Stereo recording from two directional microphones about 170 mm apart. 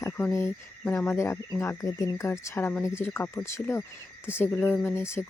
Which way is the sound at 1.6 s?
15° left (ahead or behind).